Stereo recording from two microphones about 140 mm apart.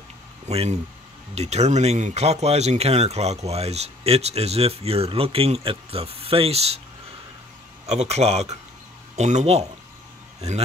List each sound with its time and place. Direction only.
0.5 s speech: 50° right (ahead or behind)
7.8 s speech: 50° right (ahead or behind)